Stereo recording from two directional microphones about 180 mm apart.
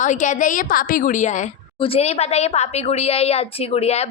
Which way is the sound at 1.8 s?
30° left (ahead or behind).